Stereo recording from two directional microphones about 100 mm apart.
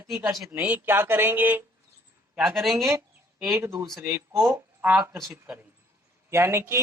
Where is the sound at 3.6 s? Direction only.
25° right (ahead or behind).